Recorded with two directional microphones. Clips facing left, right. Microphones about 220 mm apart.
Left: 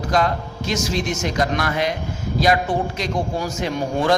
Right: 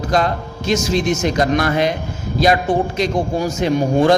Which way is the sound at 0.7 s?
25° right (ahead or behind).